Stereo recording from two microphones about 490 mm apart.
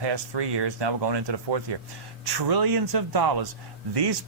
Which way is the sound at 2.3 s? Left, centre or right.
Right.